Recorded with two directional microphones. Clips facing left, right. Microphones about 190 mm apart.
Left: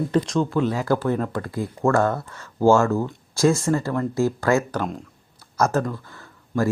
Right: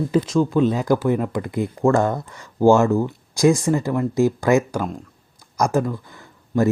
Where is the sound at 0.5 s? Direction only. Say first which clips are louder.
Right 3 dB; 20° right (ahead or behind).